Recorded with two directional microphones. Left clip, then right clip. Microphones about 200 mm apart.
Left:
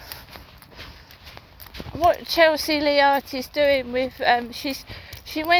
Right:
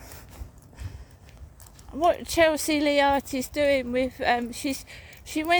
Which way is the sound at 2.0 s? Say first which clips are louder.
Left 4 dB; 50° right (ahead or behind).